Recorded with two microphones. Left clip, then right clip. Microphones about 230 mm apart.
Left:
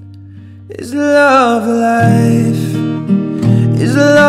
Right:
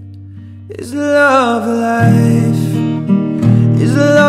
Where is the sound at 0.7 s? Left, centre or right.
Centre.